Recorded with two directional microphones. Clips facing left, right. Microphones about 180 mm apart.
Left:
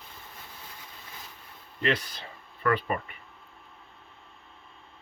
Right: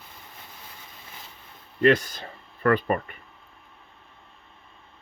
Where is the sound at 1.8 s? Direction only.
45° right (ahead or behind).